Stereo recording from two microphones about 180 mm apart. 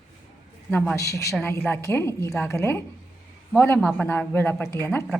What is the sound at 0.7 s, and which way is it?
A woman's voice, 10° left (ahead or behind).